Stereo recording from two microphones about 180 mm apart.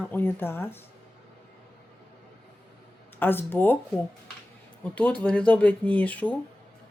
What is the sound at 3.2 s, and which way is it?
Speech, 10° left (ahead or behind).